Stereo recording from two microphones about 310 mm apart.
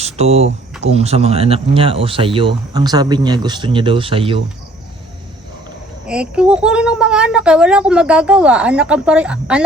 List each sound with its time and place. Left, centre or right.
0.0 s speech: centre
6.1 s a woman's voice: centre